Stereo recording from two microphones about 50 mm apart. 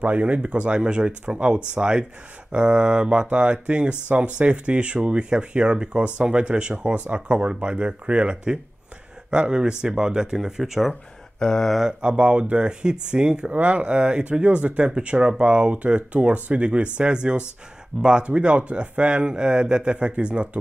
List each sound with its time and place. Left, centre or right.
0.0 s speech: right; by 10.9 s centre
10.9 s speech: centre
12.0 s speech: right